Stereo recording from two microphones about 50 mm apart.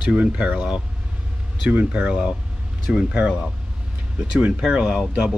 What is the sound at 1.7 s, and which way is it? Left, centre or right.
Speech, right.